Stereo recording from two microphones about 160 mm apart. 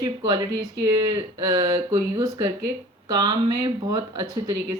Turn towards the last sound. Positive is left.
turn(degrees=-20)  # may be behind; listen again after turning